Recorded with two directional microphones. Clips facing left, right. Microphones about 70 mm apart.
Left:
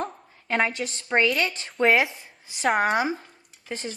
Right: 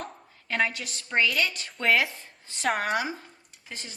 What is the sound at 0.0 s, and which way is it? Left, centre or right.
A woman's voice, left.